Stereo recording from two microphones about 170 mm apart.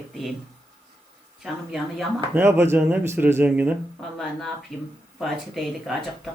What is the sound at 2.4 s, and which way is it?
A woman's voice, 15° right (ahead or behind).